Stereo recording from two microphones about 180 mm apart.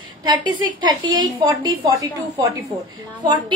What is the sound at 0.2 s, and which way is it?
A woman's voice, 25° right (ahead or behind).